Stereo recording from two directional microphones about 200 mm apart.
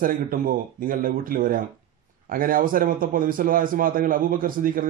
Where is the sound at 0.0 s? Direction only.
45° right (ahead or behind).